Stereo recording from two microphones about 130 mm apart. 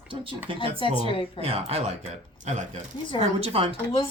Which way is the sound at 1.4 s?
50° right (ahead or behind).